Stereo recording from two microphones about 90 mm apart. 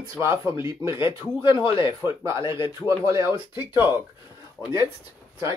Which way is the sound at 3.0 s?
35° right (ahead or behind).